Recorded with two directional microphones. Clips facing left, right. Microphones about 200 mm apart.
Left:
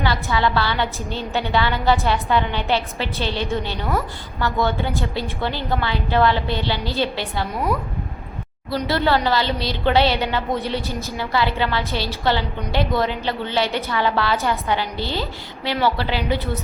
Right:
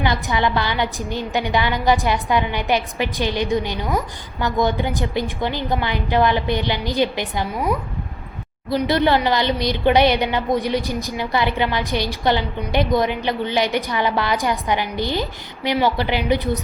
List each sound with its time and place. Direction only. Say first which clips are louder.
0.0 s a woman's voice: right 1 dB; 20° right (ahead or behind)
8.7 s a woman's voice: right 3 dB; 15° right (ahead or behind)